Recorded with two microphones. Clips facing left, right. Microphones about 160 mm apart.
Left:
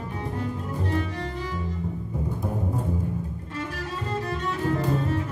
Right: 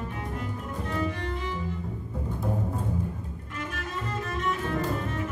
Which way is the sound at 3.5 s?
35° left (ahead or behind).